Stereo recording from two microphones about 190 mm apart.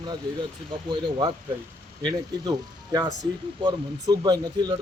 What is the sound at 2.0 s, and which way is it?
Speech, 20° right (ahead or behind).